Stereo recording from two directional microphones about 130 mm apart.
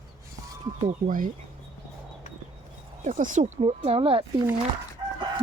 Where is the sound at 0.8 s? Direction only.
90° right.